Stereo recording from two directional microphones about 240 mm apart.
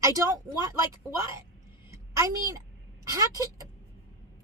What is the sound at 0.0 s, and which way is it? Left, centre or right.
Speech, centre.